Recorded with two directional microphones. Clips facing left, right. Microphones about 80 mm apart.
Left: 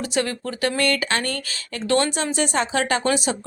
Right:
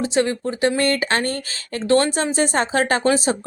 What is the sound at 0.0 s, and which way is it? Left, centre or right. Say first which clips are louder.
A woman's voice: right 5 dB; right.